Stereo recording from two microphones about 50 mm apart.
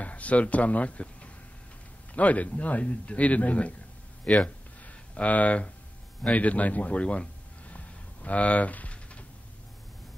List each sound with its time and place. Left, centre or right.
0.0 s speech: left
2.1 s a man's voice: left
4.2 s speech: centre
4.8 s a sound: left
6.3 s speech: left
7.0 s a sound: left